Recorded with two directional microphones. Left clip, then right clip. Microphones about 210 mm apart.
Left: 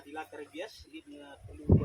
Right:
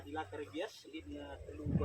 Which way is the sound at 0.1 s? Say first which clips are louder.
Even; 25° left (ahead or behind).